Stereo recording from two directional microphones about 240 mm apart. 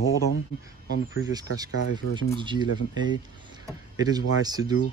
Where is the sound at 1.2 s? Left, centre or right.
Centre.